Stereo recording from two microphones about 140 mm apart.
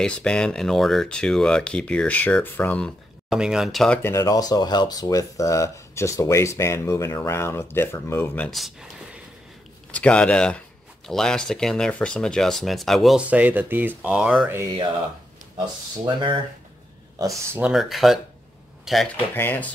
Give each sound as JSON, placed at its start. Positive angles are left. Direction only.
{"t": 0.0, "sound": "speech", "side_deg": 5}
{"t": 3.3, "sound": "speech", "side_deg": -5}
{"t": 4.0, "sound": "speech", "side_deg": 25}
{"t": 8.5, "sound": "a sound", "side_deg": 0}
{"t": 9.8, "sound": "speech", "side_deg": 10}
{"t": 13.3, "sound": "speech", "side_deg": -10}
{"t": 16.1, "sound": "speech", "side_deg": -35}
{"t": 17.2, "sound": "speech", "side_deg": -20}
{"t": 17.6, "sound": "speech", "side_deg": -5}
{"t": 19.3, "sound": "speech", "side_deg": 15}